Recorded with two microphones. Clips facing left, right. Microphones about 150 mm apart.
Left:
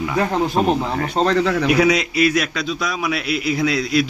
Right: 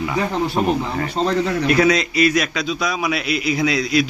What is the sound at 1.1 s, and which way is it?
Speech, 80° left.